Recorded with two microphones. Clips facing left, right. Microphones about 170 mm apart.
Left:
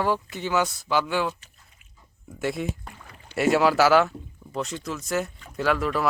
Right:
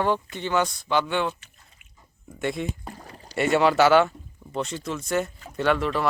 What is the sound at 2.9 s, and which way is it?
Rowboat, 35° right (ahead or behind).